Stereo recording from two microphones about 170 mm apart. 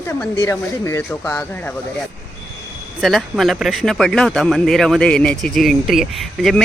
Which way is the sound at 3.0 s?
Centre (ahead or behind).